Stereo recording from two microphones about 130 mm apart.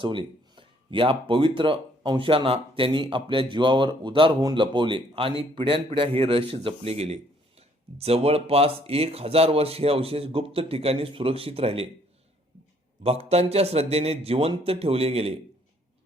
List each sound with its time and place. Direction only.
0.0 s speech: 40° right (ahead or behind)
13.0 s speech: 50° right (ahead or behind)